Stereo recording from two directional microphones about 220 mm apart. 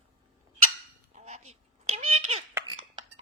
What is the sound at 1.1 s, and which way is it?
Cat, 30° right (ahead or behind).